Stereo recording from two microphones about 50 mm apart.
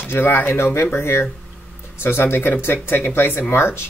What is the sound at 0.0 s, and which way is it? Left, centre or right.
Speech, left.